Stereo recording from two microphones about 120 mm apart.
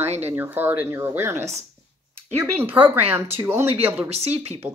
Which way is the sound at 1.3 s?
70° right (ahead or behind).